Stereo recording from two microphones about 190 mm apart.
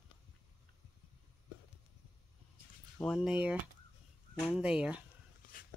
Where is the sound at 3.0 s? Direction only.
Centre (ahead or behind).